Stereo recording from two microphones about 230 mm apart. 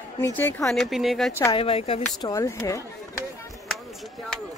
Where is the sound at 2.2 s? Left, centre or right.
Centre.